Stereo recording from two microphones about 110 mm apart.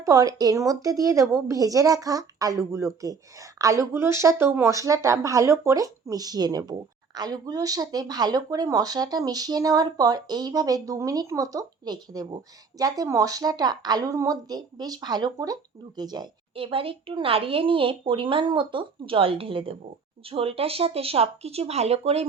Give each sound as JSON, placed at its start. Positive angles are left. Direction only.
{"t": 0.0, "sound": "a woman's voice", "side_deg": -30}
{"t": 16.6, "sound": "speech", "side_deg": -55}